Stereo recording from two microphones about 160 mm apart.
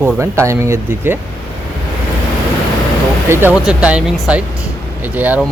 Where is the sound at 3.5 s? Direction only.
5° right (ahead or behind).